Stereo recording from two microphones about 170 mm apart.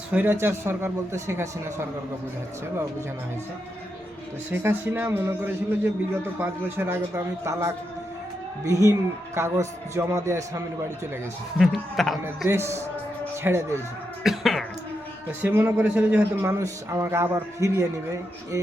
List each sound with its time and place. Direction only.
0.1 s speech: 10° right (ahead or behind)
4.5 s a man's voice: 15° right (ahead or behind)
11.5 s speech: centre (ahead or behind)
12.5 s speech: 15° right (ahead or behind)
14.3 s throat clearing: centre (ahead or behind)
15.4 s speech: 10° right (ahead or behind)